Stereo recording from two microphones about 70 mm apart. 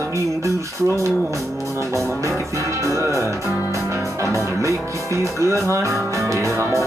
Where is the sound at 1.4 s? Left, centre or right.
Centre.